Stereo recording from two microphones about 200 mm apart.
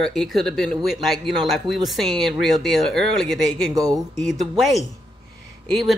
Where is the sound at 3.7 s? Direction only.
15° right (ahead or behind).